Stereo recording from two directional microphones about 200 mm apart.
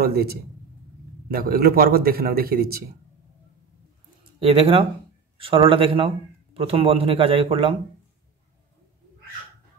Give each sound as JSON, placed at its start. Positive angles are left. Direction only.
{"t": 0.0, "sound": "a man's voice", "side_deg": -50}
{"t": 4.2, "sound": "speech", "side_deg": -30}